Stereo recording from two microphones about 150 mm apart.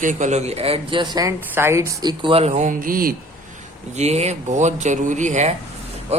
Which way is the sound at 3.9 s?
50° right (ahead or behind).